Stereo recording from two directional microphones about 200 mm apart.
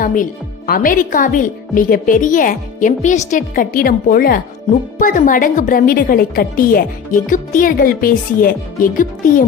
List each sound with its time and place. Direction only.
0.0 s a woman's voice: 40° left (ahead or behind)